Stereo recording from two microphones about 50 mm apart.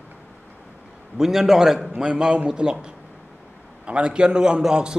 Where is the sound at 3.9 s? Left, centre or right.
Right.